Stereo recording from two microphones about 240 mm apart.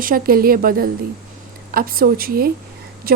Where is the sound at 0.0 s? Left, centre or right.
Right.